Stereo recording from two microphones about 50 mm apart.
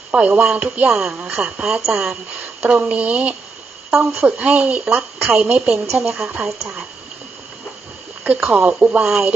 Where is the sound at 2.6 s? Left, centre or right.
Right.